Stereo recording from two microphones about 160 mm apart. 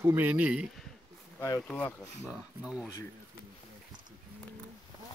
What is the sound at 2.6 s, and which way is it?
Speech, 5° right (ahead or behind).